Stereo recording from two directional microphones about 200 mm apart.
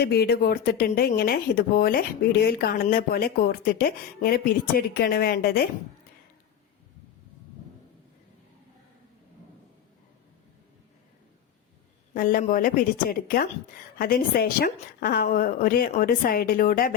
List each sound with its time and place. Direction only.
0.0 s speech: 55° left (ahead or behind)
12.1 s speech: 45° left (ahead or behind)